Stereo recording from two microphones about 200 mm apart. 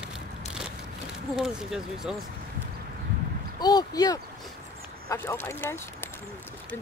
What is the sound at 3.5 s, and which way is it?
Speech, 20° left (ahead or behind).